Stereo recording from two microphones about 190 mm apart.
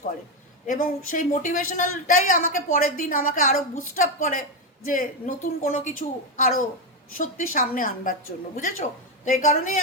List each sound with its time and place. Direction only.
0.7 s a woman's voice: 45° left (ahead or behind)